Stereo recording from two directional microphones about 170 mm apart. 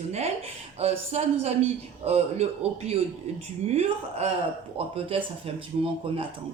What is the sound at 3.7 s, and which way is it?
Speech, 40° right (ahead or behind).